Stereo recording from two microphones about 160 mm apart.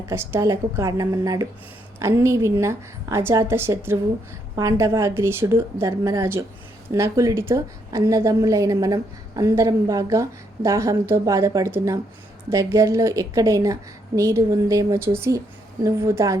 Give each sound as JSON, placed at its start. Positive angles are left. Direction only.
{"t": 0.1, "sound": "a woman's voice", "side_deg": -15}